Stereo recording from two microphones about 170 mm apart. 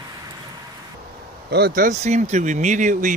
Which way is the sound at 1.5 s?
65° right (ahead or behind).